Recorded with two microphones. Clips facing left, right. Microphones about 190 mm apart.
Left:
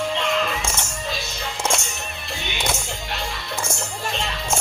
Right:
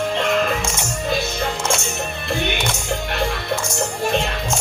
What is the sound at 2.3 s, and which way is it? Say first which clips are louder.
Music: right 9 dB; 60° right (ahead or behind).